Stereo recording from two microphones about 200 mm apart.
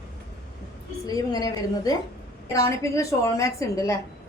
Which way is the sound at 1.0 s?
20° left (ahead or behind).